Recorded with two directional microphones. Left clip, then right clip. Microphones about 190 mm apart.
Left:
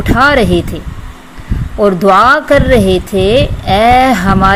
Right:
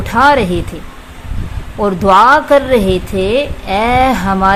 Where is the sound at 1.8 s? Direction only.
20° left (ahead or behind).